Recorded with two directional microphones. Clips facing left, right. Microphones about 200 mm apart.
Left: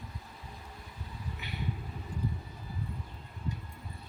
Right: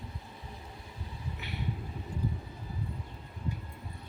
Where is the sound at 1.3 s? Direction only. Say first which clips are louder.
Right 2 dB; centre (ahead or behind).